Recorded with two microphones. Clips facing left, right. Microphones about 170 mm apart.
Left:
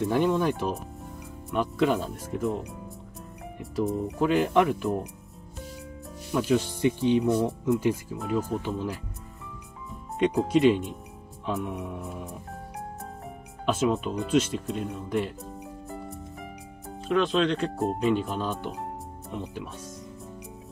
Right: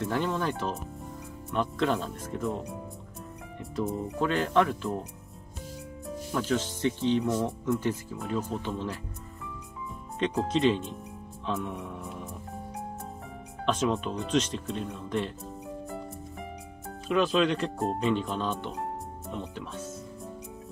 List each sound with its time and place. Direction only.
0.1 s speech: 15° left (ahead or behind)
3.7 s speech: 5° left (ahead or behind)
6.3 s speech: 10° left (ahead or behind)
10.1 s speech: 10° left (ahead or behind)
13.7 s speech: 5° left (ahead or behind)
16.8 s speech: 5° right (ahead or behind)